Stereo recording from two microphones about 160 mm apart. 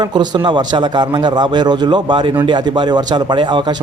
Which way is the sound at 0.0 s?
25° right (ahead or behind).